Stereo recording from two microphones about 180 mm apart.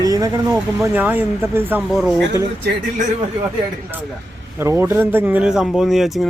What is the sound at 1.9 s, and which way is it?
Speech, centre (ahead or behind).